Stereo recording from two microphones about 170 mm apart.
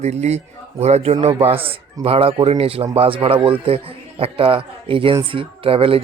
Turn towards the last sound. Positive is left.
turn(degrees=-35)  # may be behind; listen again after turning